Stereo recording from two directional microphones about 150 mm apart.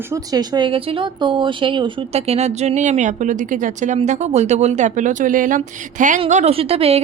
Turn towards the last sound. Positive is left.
turn(degrees=-40)  # may be behind; listen again after turning